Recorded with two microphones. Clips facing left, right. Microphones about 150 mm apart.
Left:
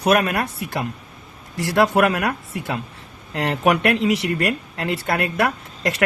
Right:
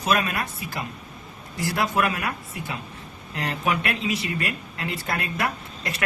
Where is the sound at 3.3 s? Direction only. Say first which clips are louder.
Left 7 dB; 70° left (ahead or behind).